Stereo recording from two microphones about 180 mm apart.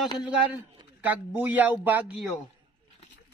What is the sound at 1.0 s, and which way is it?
Speech, 10° right (ahead or behind).